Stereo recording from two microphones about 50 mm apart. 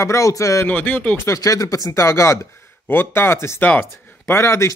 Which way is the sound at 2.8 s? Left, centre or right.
Left.